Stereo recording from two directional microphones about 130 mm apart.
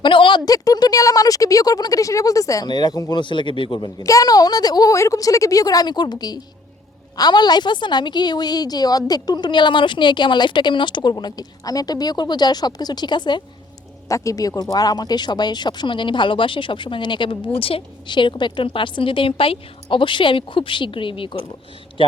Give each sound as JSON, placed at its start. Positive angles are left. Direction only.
{"t": 0.0, "sound": "speech", "side_deg": 40}
{"t": 14.1, "sound": "speech", "side_deg": 25}